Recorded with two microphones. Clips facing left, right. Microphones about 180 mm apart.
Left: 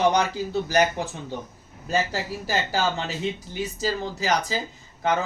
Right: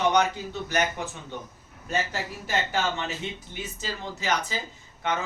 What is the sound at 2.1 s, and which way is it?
Speech, 35° left (ahead or behind).